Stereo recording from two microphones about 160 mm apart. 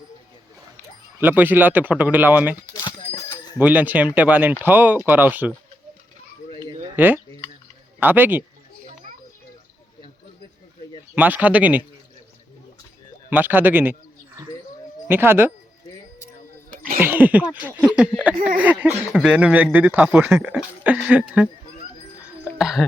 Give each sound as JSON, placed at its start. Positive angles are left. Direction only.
{"t": 1.2, "sound": "speech", "side_deg": -10}
{"t": 2.7, "sound": "a sound", "side_deg": 30}
{"t": 3.2, "sound": "a sound", "side_deg": 15}
{"t": 3.6, "sound": "speech", "side_deg": -10}
{"t": 6.9, "sound": "speech", "side_deg": -10}
{"t": 11.1, "sound": "speech", "side_deg": -10}
{"t": 13.3, "sound": "speech", "side_deg": -10}
{"t": 15.0, "sound": "speech", "side_deg": -15}
{"t": 17.0, "sound": "speech", "side_deg": -10}
{"t": 17.7, "sound": "a sound", "side_deg": -10}
{"t": 18.4, "sound": "speech", "side_deg": -10}
{"t": 22.5, "sound": "speech", "side_deg": -5}